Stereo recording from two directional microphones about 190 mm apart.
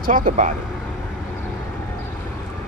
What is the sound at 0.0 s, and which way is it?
Speech, 45° right (ahead or behind).